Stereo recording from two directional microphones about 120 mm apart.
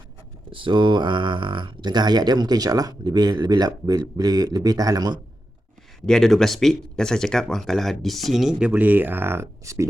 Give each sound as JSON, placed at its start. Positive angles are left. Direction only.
{"t": 0.5, "sound": "speech", "side_deg": -45}
{"t": 6.1, "sound": "speech", "side_deg": 5}